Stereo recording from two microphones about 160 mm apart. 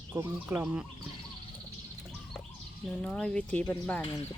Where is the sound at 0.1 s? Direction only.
15° right (ahead or behind).